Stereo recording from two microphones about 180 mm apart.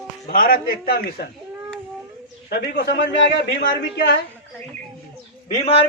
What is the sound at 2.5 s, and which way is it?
A man's voice, 60° left (ahead or behind).